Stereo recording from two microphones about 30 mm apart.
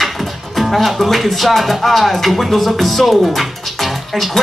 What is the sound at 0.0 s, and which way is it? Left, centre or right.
Speech, centre.